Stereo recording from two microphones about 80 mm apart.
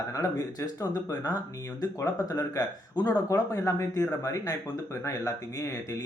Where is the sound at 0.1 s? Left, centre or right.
Left.